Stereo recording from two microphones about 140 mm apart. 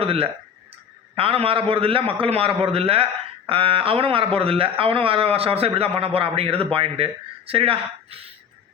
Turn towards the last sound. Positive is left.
turn(degrees=-40)  # may be behind; listen again after turning